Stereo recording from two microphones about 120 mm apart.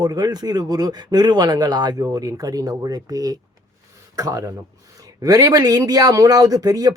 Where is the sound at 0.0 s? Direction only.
35° right (ahead or behind).